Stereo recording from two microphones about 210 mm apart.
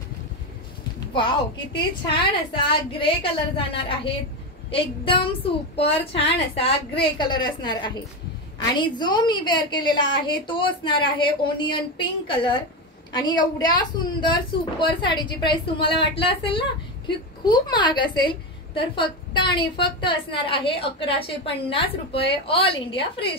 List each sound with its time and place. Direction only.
1.1 s a woman's voice: 25° left (ahead or behind)